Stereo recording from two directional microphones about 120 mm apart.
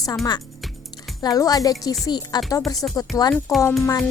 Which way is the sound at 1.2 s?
30° left (ahead or behind).